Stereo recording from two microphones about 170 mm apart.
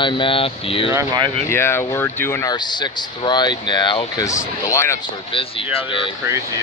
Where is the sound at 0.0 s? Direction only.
30° left (ahead or behind).